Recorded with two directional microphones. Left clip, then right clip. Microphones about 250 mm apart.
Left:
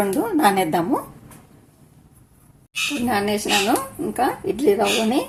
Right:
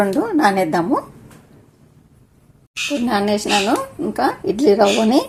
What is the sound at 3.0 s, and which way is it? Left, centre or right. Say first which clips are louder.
Speech: right 4 dB; centre.